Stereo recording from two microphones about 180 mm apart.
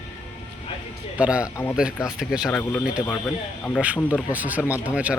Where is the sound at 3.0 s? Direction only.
10° left (ahead or behind).